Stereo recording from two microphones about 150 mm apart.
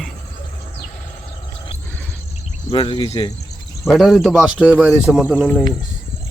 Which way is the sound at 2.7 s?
35° left (ahead or behind).